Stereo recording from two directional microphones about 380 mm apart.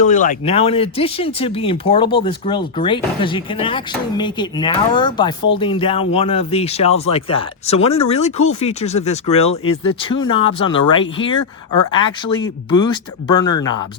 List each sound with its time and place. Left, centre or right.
0.0 s speech: centre